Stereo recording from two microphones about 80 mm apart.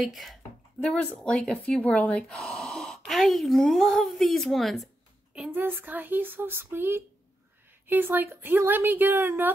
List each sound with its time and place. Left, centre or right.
0.0 s a woman's voice: centre
0.8 s speech: centre
1.2 s a woman's voice: centre
1.8 s a woman's voice: centre
5.5 s a woman's voice: right